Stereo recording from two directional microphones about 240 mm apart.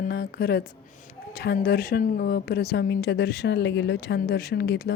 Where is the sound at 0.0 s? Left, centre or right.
Left.